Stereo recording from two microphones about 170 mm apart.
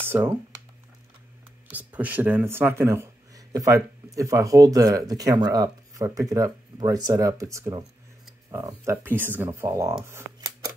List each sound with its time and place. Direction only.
0.0 s speech: 15° right (ahead or behind)
1.7 s speech: 10° right (ahead or behind)
10.0 s scissors: 20° right (ahead or behind)